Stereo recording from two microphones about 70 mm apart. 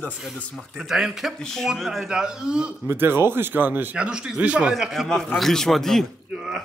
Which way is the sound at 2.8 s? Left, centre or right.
Right.